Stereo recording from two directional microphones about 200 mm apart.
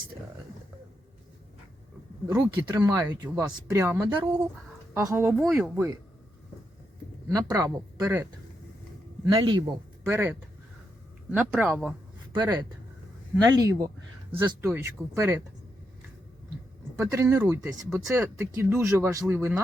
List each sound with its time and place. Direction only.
2.2 s speech: 15° right (ahead or behind)
7.3 s speech: 15° right (ahead or behind)
9.3 s speech: 20° right (ahead or behind); by 11.9 s 5° right (ahead or behind)
12.3 s speech: 20° right (ahead or behind)
17.0 s speech: 15° right (ahead or behind)